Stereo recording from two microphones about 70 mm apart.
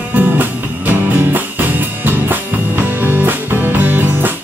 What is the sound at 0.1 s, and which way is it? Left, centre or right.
Music, right.